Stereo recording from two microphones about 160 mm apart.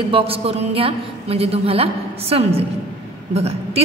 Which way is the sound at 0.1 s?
35° right (ahead or behind).